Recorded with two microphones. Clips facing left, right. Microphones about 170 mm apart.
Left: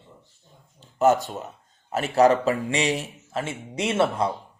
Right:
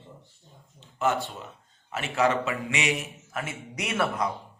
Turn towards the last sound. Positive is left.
turn(degrees=30)  # may be behind; listen again after turning